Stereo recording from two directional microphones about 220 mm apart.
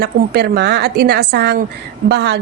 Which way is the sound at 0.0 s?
45° right (ahead or behind).